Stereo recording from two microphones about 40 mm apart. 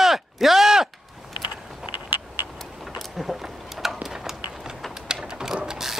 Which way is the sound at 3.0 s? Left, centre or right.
Centre.